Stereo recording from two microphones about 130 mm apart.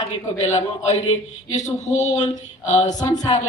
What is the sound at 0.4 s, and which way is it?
Speech, 60° left (ahead or behind).